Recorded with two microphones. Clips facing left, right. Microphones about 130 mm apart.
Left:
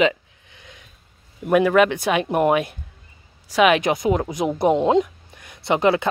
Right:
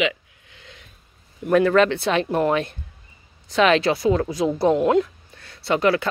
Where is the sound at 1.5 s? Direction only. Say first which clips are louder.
Even; 10° left (ahead or behind).